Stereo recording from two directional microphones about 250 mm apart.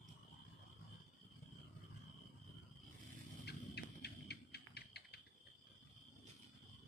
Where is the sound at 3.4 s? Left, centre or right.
Left.